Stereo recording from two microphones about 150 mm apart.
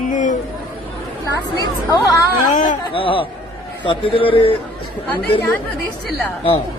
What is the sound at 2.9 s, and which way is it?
A man's voice, 35° left (ahead or behind).